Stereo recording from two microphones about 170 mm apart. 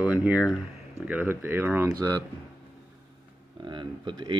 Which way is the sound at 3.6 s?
30° right (ahead or behind).